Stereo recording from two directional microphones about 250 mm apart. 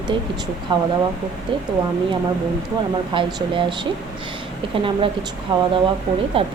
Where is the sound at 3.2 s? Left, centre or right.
Centre.